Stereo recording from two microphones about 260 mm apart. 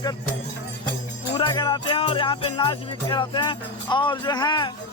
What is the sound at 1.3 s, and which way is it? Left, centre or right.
Music, centre.